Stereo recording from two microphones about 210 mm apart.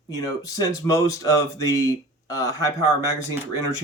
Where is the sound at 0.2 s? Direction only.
15° left (ahead or behind).